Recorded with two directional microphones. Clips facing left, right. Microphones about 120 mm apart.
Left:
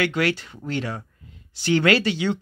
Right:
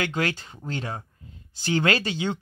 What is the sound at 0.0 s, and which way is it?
Speech, 40° right (ahead or behind).